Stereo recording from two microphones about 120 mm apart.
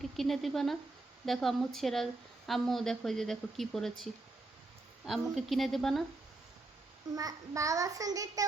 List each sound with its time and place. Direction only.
0.0 s speech: centre (ahead or behind)
5.0 s speech: centre (ahead or behind)
7.2 s a child's voice: 30° right (ahead or behind)